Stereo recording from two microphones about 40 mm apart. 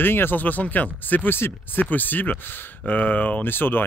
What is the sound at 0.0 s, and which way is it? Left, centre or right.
Speech, left.